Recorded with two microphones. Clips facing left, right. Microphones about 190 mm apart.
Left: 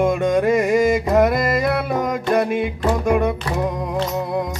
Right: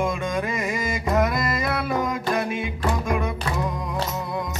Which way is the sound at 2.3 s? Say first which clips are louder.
Left 9 dB; 40° left (ahead or behind).